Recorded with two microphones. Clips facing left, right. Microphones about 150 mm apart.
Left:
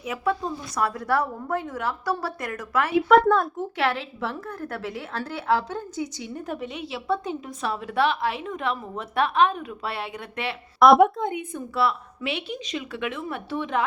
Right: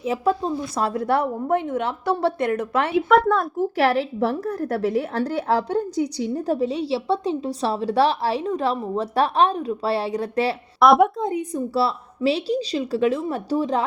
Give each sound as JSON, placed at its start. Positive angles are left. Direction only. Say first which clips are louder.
{"t": 0.0, "sound": "a woman's voice", "louder": "right 5 dB", "side_deg": -30}
{"t": 3.1, "sound": "speech", "louder": "left 1 dB", "side_deg": 0}
{"t": 3.8, "sound": "a woman's voice", "louder": "right 6 dB", "side_deg": -35}
{"t": 10.8, "sound": "a woman's voice", "louder": "even", "side_deg": 0}
{"t": 11.2, "sound": "a woman's voice", "louder": "right 5 dB", "side_deg": -35}